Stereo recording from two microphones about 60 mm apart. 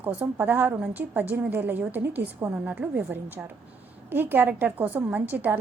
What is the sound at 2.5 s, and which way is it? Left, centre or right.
A woman's voice, right.